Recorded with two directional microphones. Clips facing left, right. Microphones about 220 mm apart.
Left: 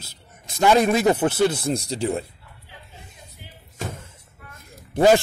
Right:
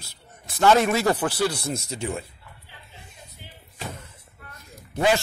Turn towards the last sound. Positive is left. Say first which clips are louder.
# left 6 dB
turn(degrees=50)  # may be behind; listen again after turning